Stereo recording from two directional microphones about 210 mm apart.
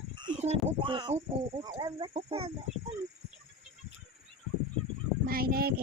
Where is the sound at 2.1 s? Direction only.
30° right (ahead or behind).